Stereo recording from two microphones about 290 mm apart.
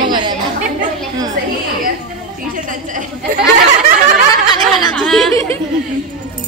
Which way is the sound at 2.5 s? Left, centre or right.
Right.